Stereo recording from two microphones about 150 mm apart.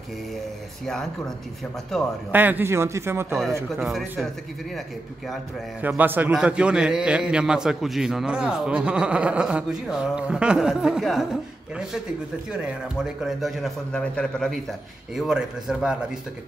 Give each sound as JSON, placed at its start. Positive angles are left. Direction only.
{"t": 2.3, "sound": "a man's voice", "side_deg": -10}
{"t": 3.8, "sound": "a man's voice", "side_deg": 0}
{"t": 5.8, "sound": "a man's voice", "side_deg": -10}
{"t": 12.5, "sound": "a man's voice", "side_deg": -5}